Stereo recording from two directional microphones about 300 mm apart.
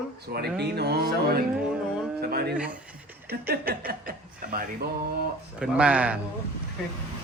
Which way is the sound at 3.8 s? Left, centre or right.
Right.